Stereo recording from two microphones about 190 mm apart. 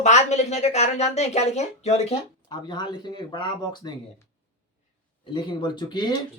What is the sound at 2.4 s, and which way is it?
Speech, 20° left (ahead or behind).